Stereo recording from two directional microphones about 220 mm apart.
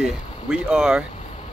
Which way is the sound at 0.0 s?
5° right (ahead or behind).